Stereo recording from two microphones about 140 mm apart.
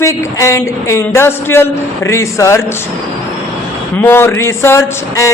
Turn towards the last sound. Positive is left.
turn(degrees=20)  # may be behind; listen again after turning